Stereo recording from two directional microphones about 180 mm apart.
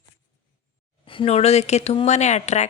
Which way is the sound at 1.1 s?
30° left (ahead or behind).